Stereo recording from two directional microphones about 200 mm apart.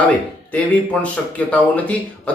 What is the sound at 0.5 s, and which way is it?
A man's voice, 5° left (ahead or behind).